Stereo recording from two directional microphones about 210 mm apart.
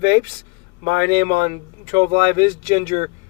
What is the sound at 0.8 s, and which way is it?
Speech, 20° right (ahead or behind).